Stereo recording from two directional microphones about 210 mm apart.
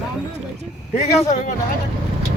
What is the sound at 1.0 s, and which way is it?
Speech, 35° left (ahead or behind).